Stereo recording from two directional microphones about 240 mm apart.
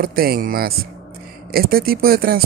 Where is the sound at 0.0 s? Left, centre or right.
Right.